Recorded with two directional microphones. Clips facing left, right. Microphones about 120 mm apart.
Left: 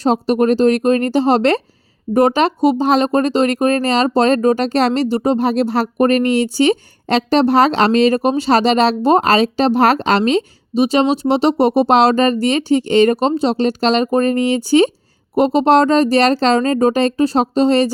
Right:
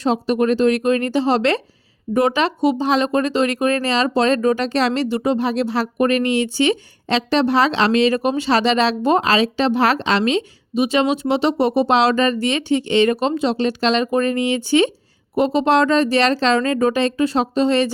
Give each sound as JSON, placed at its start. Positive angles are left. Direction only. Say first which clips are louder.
{"t": 0.0, "sound": "speech", "louder": "left 3 dB", "side_deg": 40}